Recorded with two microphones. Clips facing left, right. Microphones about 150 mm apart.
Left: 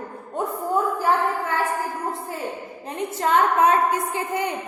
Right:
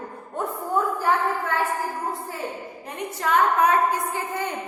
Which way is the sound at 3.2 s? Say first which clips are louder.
Left 1 dB; 30° left (ahead or behind).